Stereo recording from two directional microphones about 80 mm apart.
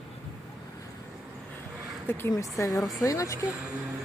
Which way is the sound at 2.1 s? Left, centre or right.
Left.